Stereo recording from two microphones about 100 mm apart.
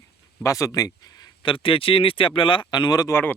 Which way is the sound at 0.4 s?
35° left (ahead or behind).